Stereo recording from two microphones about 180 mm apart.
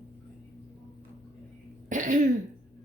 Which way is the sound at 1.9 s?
45° right (ahead or behind).